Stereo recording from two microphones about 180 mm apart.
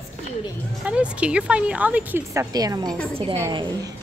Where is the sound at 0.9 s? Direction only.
5° right (ahead or behind).